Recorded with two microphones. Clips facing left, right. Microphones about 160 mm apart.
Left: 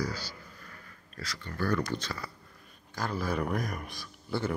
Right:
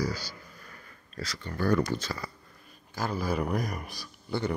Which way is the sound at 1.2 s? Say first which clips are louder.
Right 2 dB; 20° right (ahead or behind).